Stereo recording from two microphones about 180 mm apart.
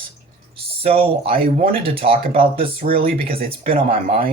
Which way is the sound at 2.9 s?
55° right (ahead or behind).